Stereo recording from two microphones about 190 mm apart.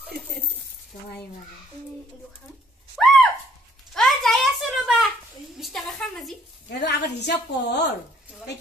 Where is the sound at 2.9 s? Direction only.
Centre (ahead or behind).